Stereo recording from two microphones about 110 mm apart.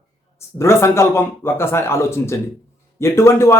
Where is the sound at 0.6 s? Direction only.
25° left (ahead or behind).